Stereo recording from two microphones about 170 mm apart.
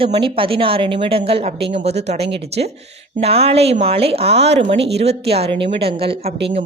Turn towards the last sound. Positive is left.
turn(degrees=-35)  # may be behind; listen again after turning